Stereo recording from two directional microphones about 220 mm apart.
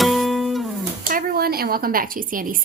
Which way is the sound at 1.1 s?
45° right (ahead or behind).